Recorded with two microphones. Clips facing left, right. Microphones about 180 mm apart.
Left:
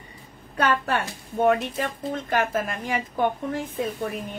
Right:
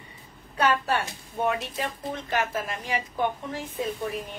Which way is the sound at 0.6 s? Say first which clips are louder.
Left 1 dB; 55° left (ahead or behind).